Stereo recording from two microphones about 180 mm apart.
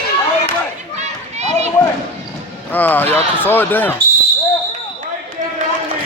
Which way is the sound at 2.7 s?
10° left (ahead or behind).